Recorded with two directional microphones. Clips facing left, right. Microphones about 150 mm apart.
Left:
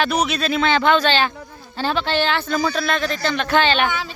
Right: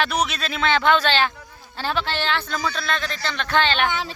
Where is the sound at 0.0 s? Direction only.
Centre (ahead or behind).